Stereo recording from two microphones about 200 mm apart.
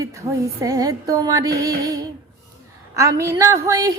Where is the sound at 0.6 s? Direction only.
15° right (ahead or behind).